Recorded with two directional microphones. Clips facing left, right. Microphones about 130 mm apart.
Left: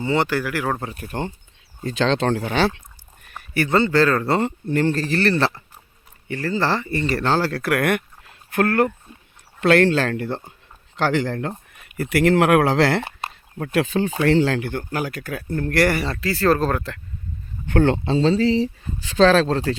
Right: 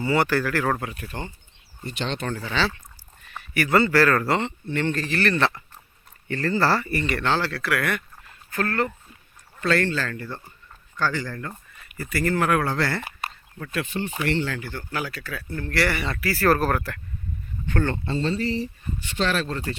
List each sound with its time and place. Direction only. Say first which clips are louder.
0.0 s speech: left 1 dB; 20° left (ahead or behind)
0.8 s speech: left 1 dB; 30° left (ahead or behind)
1.0 s speech: left 6 dB; 55° left (ahead or behind)
2.0 s speech: left 9 dB; 85° left; by 2.7 s 55° left (ahead or behind)
3.5 s speech: left 2 dB; 25° left (ahead or behind)
4.4 s speech: left 5 dB; 40° left (ahead or behind)
6.2 s speech: even; 15° left (ahead or behind)
7.0 s speech: left 4 dB; 35° left (ahead or behind); by 8.9 s 60° left (ahead or behind)
9.6 s speech: left 7 dB; 80° left
14.9 s speech: left 1 dB; 45° left (ahead or behind); by 17.0 s 20° left (ahead or behind)
17.7 s speech: left 7 dB; 70° left (ahead or behind); by 19.7 s 90° left